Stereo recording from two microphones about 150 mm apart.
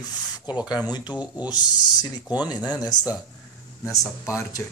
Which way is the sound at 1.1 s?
10° right (ahead or behind).